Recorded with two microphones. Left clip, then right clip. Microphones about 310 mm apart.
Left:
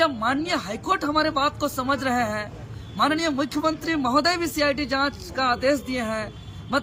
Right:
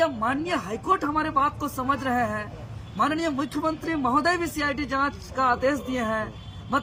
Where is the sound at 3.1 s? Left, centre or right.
Centre.